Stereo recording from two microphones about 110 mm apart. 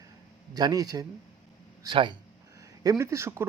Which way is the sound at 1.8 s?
45° right (ahead or behind).